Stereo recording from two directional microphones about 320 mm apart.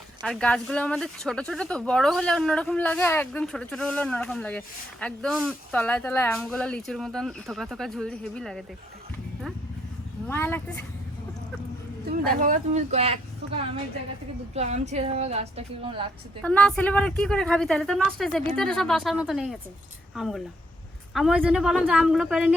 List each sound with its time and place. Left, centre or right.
0.2 s speech: centre
10.2 s speech: centre
12.1 s speech: right
16.4 s speech: centre